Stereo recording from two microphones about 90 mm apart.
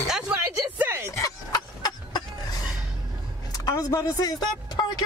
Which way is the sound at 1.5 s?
45° left (ahead or behind).